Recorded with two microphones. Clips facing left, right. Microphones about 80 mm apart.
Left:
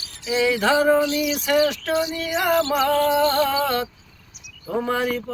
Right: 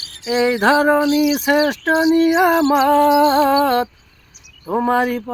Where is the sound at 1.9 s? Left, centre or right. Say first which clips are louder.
Right 10 dB; right.